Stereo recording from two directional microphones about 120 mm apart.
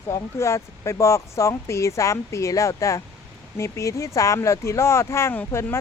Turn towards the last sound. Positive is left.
turn(degrees=20)  # may be behind; listen again after turning